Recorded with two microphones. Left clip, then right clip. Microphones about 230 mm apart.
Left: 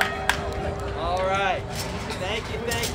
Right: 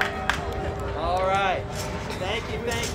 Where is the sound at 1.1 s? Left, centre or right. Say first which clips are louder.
Right 1 dB; centre.